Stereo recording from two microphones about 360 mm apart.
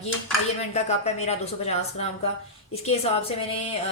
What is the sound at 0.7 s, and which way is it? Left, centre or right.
Speech, centre.